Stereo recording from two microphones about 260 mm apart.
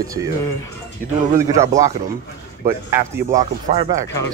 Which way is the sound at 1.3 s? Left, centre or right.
Centre.